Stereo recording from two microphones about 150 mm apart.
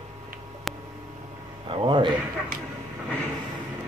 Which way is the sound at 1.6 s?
35° right (ahead or behind).